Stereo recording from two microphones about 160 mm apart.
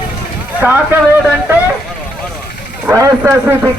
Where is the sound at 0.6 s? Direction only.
10° right (ahead or behind).